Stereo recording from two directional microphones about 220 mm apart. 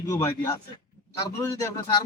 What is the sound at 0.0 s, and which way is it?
Speech, 15° left (ahead or behind).